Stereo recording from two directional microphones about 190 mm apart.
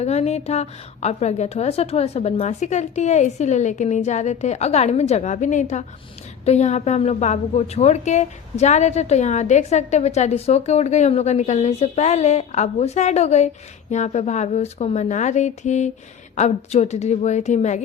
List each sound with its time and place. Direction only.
0.0 s a woman's voice: 35° left (ahead or behind)